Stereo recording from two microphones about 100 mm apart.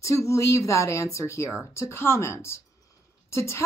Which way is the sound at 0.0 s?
30° left (ahead or behind).